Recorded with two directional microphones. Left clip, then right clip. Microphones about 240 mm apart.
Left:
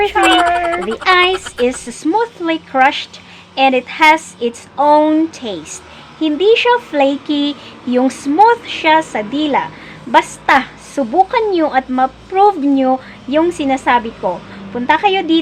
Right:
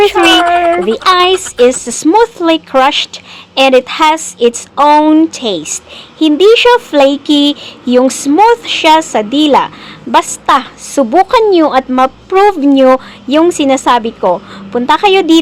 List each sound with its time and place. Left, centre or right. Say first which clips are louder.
0.2 s speech: even; right
0.7 s speech: right 7 dB; centre
1.0 s speech: right 2 dB; right
1.3 s speech: right 7 dB; centre
1.8 s speech: right 8 dB; right